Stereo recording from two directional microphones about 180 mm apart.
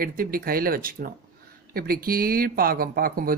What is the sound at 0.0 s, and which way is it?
Speech, 55° right (ahead or behind).